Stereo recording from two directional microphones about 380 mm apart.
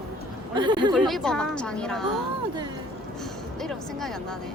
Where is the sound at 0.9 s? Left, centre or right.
Centre.